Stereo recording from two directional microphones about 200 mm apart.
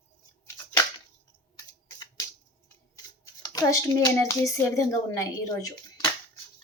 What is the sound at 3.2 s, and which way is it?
A woman's voice, 20° left (ahead or behind).